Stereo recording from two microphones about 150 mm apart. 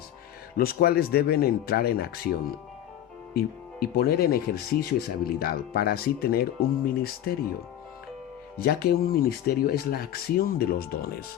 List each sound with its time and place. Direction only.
0.5 s speech: 85° left
3.3 s speech: 90° left
8.5 s speech: 90° left